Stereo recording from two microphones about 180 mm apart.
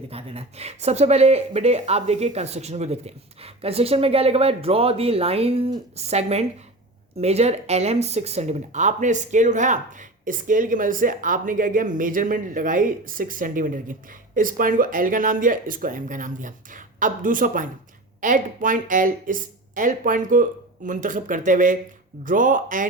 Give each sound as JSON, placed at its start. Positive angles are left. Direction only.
{"t": 0.1, "sound": "speech", "side_deg": -35}